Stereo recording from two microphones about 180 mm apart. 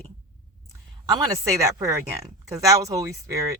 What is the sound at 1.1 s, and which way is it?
Speech, 15° right (ahead or behind).